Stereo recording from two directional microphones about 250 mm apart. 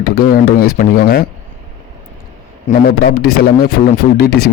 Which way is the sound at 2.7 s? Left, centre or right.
Left.